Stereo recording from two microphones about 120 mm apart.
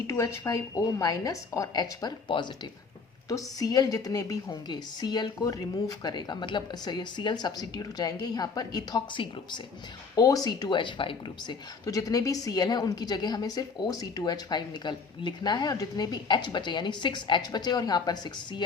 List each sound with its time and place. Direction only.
0.1 s a woman's voice: 25° left (ahead or behind); by 2.5 s 40° left (ahead or behind)
3.2 s a woman's voice: 30° left (ahead or behind)
10.2 s a woman's voice: 30° left (ahead or behind)
11.9 s a woman's voice: 30° left (ahead or behind)